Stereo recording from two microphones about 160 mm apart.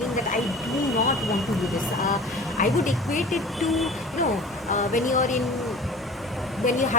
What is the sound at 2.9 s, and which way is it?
Speech, centre (ahead or behind).